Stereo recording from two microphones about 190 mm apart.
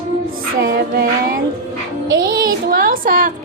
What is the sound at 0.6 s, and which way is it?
Music, 55° right (ahead or behind).